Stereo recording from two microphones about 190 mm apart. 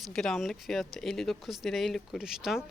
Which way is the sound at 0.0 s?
Centre (ahead or behind).